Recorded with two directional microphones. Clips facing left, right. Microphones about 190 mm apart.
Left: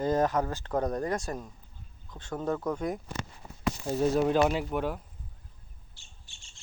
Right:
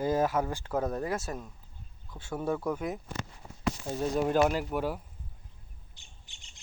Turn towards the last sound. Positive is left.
turn(degrees=-20)  # may be behind; listen again after turning